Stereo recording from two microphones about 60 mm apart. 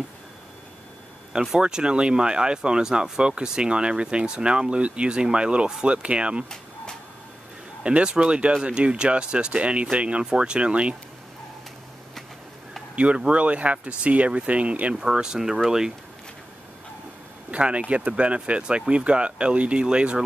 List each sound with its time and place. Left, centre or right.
1.3 s speech: centre
7.8 s speech: centre
12.9 s speech: right
15.0 s speech: centre
17.5 s speech: right